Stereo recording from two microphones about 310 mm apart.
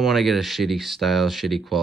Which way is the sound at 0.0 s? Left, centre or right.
Centre.